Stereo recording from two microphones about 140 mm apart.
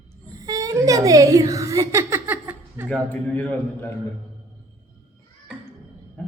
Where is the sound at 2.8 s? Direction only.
10° left (ahead or behind).